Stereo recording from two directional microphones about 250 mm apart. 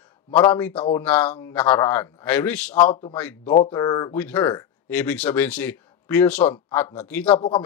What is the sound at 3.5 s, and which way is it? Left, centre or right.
Speech, left.